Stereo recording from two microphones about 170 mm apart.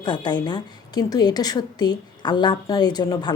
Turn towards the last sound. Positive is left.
turn(degrees=25)  # may be behind; listen again after turning